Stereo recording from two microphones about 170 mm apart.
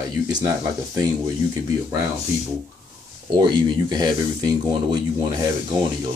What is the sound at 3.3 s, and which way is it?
Speech, 25° right (ahead or behind).